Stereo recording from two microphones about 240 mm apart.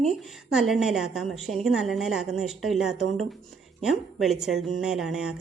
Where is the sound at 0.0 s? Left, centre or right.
Centre.